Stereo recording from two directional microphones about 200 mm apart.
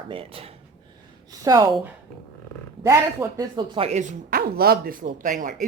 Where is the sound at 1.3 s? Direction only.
15° right (ahead or behind).